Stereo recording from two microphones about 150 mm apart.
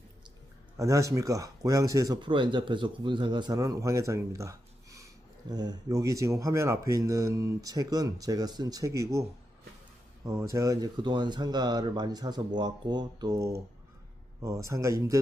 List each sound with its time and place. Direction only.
0.8 s speech: 20° right (ahead or behind)
10.2 s speech: 20° right (ahead or behind)